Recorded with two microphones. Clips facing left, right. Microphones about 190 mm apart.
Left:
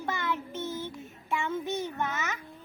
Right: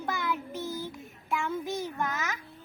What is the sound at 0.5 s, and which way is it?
Child singing, 35° right (ahead or behind).